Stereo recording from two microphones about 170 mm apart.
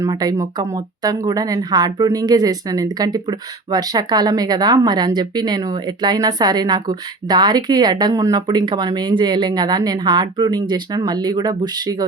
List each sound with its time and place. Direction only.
0.0 s speech: 20° right (ahead or behind)